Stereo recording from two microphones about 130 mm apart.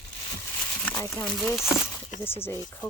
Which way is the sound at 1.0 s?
20° left (ahead or behind).